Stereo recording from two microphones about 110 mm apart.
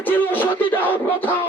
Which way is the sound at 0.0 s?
15° left (ahead or behind).